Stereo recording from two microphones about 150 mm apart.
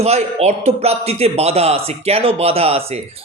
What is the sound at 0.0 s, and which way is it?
Speech, 45° right (ahead or behind).